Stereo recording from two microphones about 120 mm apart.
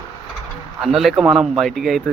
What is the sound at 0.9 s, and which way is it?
Speech, 5° right (ahead or behind).